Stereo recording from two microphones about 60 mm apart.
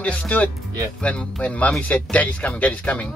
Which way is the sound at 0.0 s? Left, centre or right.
Left.